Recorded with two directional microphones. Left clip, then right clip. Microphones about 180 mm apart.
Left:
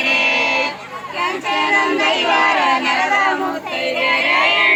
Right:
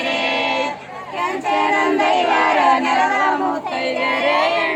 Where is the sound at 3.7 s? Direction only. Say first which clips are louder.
Left 2 dB; 70° right (ahead or behind).